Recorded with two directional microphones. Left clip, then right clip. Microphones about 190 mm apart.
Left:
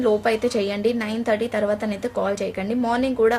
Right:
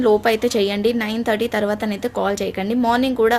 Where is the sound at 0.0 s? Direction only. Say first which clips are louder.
Right 4 dB; 35° right (ahead or behind).